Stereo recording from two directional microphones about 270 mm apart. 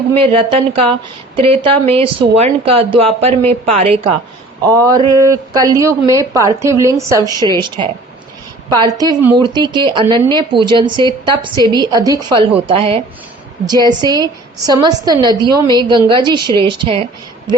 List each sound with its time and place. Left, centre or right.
0.1 s a woman's voice: centre
5.0 s speech: centre
5.3 s a woman's voice: centre